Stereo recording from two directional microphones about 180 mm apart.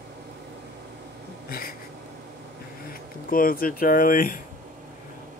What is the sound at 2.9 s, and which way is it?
Speech, 55° left (ahead or behind).